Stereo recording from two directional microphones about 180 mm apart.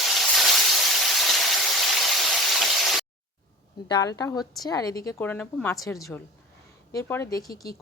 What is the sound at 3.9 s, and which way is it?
A woman's voice, 20° left (ahead or behind).